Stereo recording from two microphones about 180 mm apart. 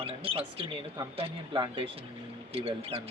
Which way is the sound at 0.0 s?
35° right (ahead or behind).